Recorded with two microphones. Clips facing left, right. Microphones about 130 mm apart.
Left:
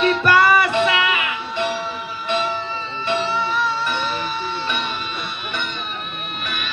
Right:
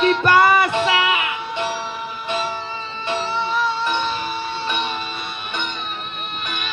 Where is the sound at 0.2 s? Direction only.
20° right (ahead or behind).